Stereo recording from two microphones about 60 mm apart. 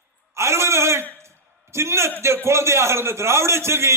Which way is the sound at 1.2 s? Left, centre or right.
Right.